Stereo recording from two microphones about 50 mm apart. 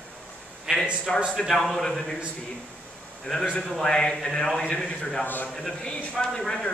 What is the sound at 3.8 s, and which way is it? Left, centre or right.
Speech, centre.